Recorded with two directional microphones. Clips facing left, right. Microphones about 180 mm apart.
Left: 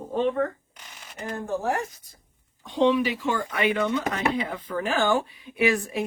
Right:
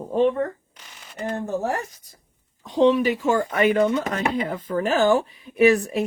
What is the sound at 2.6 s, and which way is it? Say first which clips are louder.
Speech: right 4 dB; 40° right (ahead or behind).